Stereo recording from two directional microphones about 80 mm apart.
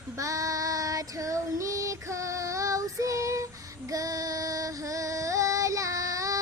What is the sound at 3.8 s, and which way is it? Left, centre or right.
Female singing, right.